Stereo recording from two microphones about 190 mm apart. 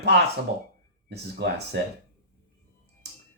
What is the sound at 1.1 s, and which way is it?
Speech, 60° right (ahead or behind).